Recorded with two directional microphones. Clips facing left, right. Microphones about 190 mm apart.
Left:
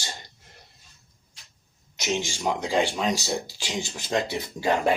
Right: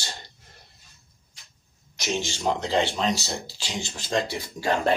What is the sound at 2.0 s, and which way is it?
Speech, 15° left (ahead or behind).